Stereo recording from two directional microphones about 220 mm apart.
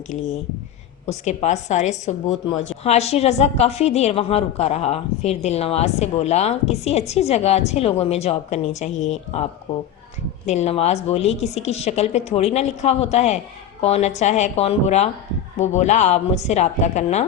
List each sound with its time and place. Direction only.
1.0 s a woman's voice: 30° left (ahead or behind)
10.4 s a woman's voice: 30° left (ahead or behind)